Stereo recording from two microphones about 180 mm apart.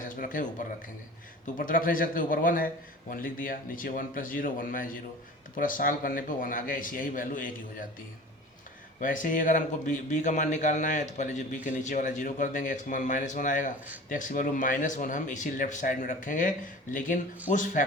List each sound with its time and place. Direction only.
0.0 s a sound: 50° left (ahead or behind)
1.5 s speech: 50° left (ahead or behind)
9.0 s speech: 50° left (ahead or behind)